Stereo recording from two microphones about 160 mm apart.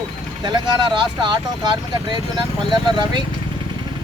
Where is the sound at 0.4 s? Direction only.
30° right (ahead or behind).